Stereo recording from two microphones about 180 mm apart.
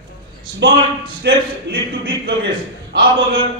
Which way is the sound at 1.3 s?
65° right (ahead or behind).